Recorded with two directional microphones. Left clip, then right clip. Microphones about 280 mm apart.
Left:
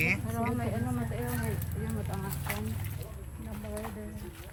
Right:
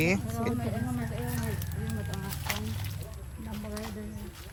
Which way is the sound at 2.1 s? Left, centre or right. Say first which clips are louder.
Right 4 dB; centre.